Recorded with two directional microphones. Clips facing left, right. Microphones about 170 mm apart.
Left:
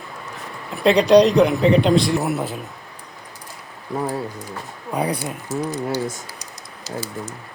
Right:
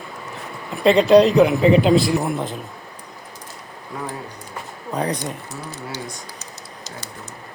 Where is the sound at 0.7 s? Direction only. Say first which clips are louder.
Right 1 dB; centre (ahead or behind).